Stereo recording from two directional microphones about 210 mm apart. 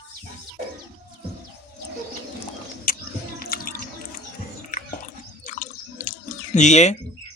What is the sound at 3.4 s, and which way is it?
Drip, 45° left (ahead or behind).